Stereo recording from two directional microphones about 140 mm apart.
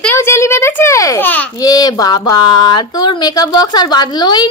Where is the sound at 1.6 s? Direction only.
25° left (ahead or behind).